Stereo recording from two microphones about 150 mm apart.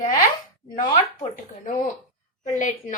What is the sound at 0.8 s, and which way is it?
A woman's voice, 60° left (ahead or behind).